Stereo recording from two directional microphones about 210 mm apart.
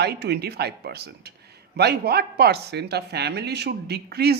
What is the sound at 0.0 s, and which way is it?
Speech, 50° right (ahead or behind).